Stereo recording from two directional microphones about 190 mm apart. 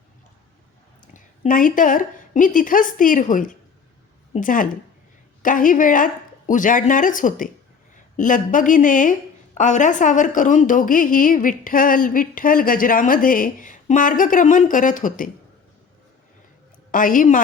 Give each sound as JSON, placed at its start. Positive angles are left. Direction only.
{"t": 1.0, "sound": "a woman's voice", "side_deg": 45}
{"t": 16.9, "sound": "a woman's voice", "side_deg": 45}